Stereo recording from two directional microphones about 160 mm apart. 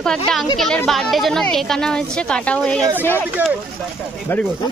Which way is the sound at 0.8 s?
Centre (ahead or behind).